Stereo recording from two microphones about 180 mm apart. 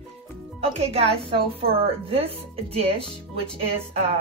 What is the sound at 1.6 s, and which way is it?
Speech, 35° right (ahead or behind).